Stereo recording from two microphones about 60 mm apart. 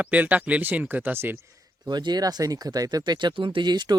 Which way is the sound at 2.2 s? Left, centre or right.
Right.